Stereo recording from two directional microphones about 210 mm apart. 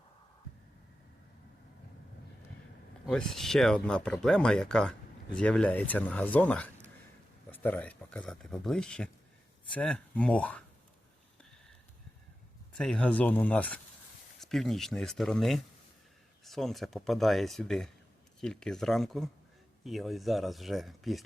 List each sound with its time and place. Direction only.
3.1 s speech: 5° left (ahead or behind)
12.7 s speech: 5° left (ahead or behind)